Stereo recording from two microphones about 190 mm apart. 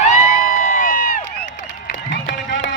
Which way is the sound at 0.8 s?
45° left (ahead or behind).